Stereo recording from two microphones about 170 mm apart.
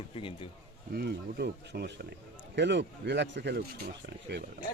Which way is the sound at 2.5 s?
90° right.